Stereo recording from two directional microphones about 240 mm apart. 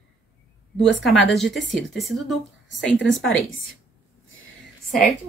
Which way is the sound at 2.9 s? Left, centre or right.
Left.